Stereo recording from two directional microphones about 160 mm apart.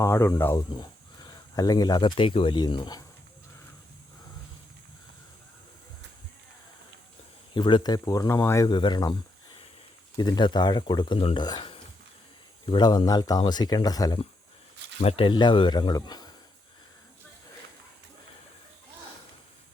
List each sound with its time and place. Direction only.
0.0 s speech: 15° left (ahead or behind)
0.8 s speech: 25° left (ahead or behind)
7.5 s speech: 30° left (ahead or behind)
10.2 s speech: 25° left (ahead or behind)
11.4 s a sound: 30° left (ahead or behind)
12.6 s speech: 30° left (ahead or behind)
15.0 s speech: 35° left (ahead or behind)